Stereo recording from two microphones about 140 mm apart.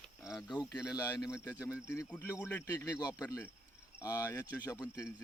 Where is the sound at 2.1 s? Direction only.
10° left (ahead or behind); by 3.4 s 30° left (ahead or behind).